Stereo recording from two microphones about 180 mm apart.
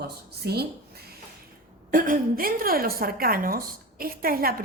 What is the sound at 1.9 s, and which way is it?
A woman's voice, 50° right (ahead or behind).